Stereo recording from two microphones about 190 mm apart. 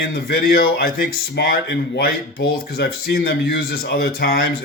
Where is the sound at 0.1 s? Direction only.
50° left (ahead or behind).